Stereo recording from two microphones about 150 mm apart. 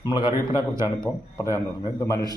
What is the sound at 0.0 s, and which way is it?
A man's voice, 30° left (ahead or behind).